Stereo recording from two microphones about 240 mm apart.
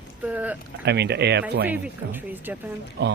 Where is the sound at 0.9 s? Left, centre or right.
Right.